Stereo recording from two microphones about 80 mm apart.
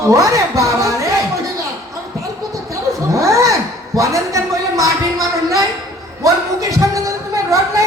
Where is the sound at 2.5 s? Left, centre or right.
Right.